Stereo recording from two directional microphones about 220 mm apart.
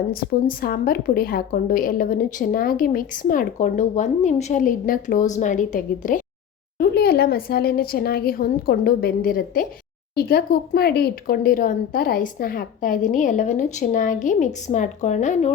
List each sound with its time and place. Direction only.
0.1 s a woman's voice: 40° left (ahead or behind)